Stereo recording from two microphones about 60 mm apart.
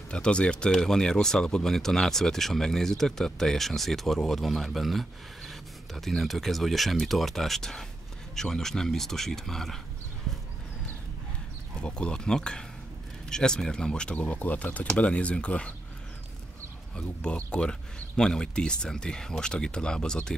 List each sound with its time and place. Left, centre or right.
0.1 s speech: centre
11.8 s speech: centre
16.9 s speech: centre